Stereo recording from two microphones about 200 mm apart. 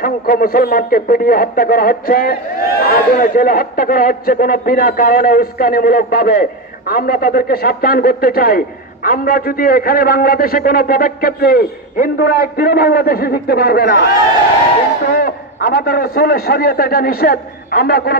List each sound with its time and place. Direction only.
0.0 s speech: 50° left (ahead or behind)
15.1 s speech: 50° left (ahead or behind)